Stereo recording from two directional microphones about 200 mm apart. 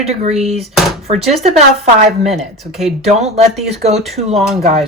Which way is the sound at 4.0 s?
Centre (ahead or behind).